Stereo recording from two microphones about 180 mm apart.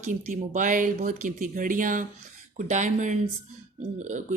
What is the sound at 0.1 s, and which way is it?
Speech, 45° right (ahead or behind).